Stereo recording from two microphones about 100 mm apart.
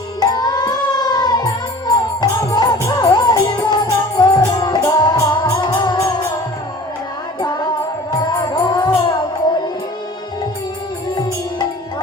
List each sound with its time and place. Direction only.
0.2 s music: 45° left (ahead or behind)
7.4 s music: 45° left (ahead or behind)